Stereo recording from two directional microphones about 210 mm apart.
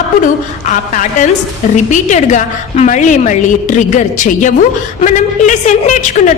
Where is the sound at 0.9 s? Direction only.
35° left (ahead or behind).